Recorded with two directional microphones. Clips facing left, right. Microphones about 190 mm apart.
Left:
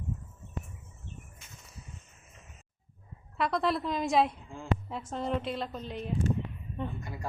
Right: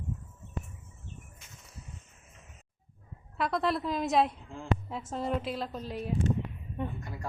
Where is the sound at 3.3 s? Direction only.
Centre (ahead or behind).